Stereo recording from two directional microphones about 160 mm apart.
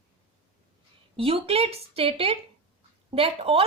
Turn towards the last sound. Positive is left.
turn(degrees=-35)  # may be behind; listen again after turning